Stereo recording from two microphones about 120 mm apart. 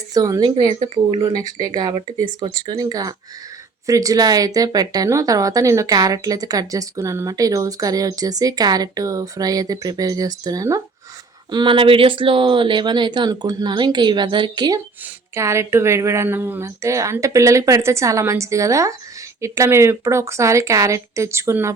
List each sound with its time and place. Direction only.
0.1 s speech: 30° right (ahead or behind)
11.5 s speech: 45° right (ahead or behind)
15.4 s speech: 25° right (ahead or behind)